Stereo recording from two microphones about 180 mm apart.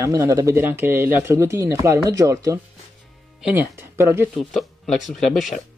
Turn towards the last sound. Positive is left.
turn(degrees=0)  # may be behind; listen again after turning